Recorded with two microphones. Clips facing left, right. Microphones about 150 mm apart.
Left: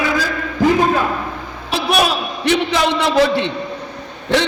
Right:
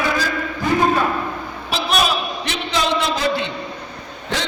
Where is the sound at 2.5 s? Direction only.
60° left (ahead or behind).